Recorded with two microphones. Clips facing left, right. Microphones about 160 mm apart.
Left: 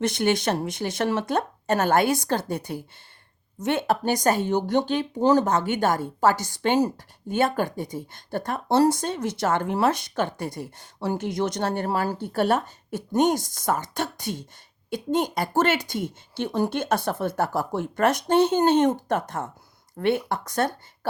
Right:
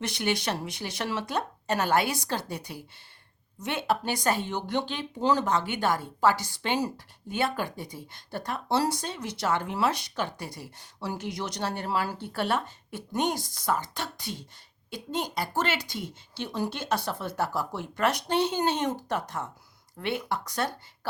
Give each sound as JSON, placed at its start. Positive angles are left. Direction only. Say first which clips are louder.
{"t": 0.0, "sound": "speech", "louder": "left 7 dB", "side_deg": 50}